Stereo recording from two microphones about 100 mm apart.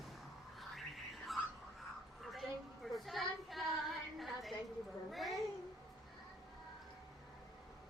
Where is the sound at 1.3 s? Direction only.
Centre (ahead or behind).